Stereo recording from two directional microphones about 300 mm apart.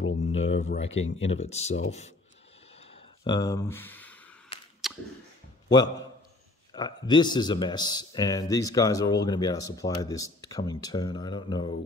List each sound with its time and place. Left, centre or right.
0.3 s speech: left
2.8 s a sound: centre
5.7 s speech: centre